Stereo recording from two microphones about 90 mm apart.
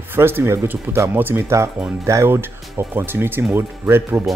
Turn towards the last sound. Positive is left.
turn(degrees=-25)  # may be behind; listen again after turning